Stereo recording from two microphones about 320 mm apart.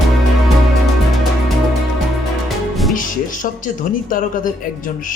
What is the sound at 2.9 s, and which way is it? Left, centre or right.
Speech, left.